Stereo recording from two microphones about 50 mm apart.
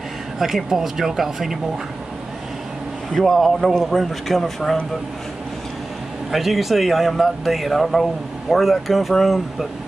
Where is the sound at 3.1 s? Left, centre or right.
Centre.